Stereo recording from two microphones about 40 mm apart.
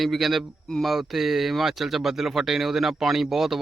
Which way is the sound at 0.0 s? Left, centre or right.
Centre.